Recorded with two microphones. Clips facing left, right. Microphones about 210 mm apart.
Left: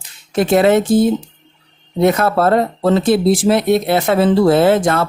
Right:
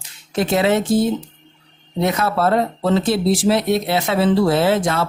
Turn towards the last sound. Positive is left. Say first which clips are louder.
# left 5 dB
turn(degrees=55)  # may be behind; listen again after turning